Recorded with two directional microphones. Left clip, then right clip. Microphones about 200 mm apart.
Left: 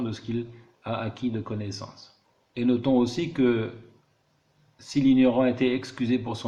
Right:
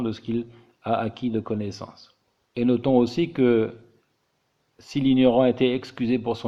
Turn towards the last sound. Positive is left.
turn(degrees=-40)  # may be behind; listen again after turning